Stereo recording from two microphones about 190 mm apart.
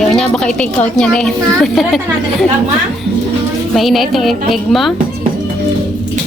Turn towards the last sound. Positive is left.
turn(degrees=0)  # may be behind; listen again after turning